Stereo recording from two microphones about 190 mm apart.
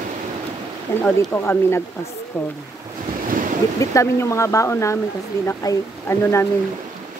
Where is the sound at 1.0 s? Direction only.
10° left (ahead or behind).